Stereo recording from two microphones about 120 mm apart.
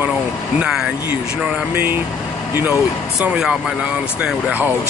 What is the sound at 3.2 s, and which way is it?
Speech, 5° right (ahead or behind).